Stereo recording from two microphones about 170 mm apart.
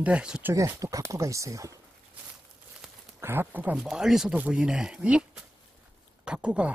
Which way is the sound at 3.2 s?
15° right (ahead or behind).